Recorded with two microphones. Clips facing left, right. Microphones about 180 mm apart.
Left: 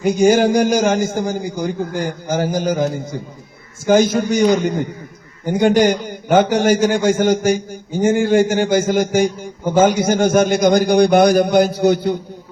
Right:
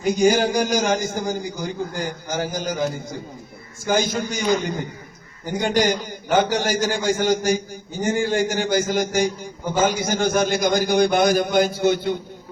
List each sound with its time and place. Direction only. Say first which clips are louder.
0.0 s a man's voice: left 5 dB; 50° left (ahead or behind)
5.5 s a man's voice: left 7 dB; 50° left (ahead or behind)